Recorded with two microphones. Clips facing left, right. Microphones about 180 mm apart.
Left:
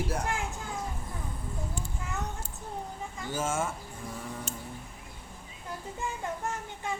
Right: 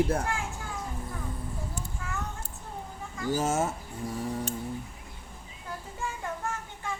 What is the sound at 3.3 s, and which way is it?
Speech, 40° right (ahead or behind).